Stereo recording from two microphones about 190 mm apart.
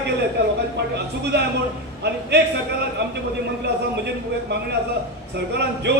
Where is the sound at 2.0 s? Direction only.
60° right (ahead or behind).